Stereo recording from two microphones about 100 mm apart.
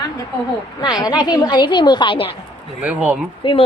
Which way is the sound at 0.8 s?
45° left (ahead or behind).